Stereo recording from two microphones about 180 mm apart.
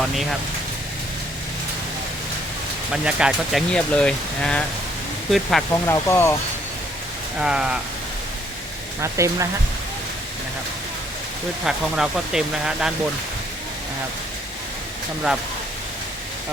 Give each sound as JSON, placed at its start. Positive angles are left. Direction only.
{"t": 2.9, "sound": "speech", "side_deg": -5}
{"t": 5.7, "sound": "speech", "side_deg": 15}
{"t": 7.3, "sound": "speech", "side_deg": -5}
{"t": 9.0, "sound": "speech", "side_deg": -15}
{"t": 11.6, "sound": "speech", "side_deg": -5}